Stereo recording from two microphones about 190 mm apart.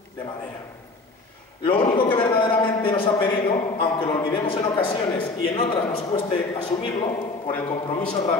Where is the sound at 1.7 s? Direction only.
30° left (ahead or behind).